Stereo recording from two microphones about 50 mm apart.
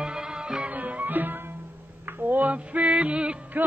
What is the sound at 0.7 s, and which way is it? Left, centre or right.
Music, right.